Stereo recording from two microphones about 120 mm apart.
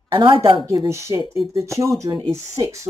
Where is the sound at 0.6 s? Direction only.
25° right (ahead or behind).